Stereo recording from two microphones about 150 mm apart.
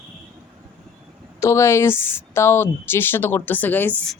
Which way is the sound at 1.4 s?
20° left (ahead or behind).